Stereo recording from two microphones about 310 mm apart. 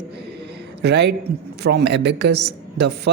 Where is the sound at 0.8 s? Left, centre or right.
Right.